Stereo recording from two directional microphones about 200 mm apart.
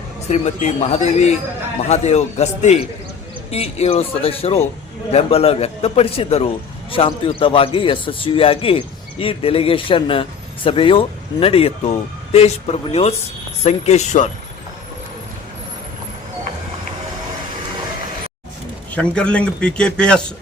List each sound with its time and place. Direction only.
0.3 s a man's voice: 35° left (ahead or behind)
18.9 s a man's voice: 5° left (ahead or behind)